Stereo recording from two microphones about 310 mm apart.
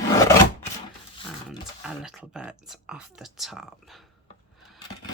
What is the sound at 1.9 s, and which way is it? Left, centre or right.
Speech, centre.